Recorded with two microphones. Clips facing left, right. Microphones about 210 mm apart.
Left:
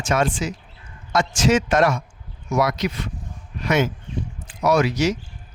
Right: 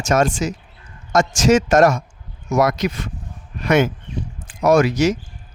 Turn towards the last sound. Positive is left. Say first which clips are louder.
# right 4 dB
turn(degrees=-50)  # may be behind; listen again after turning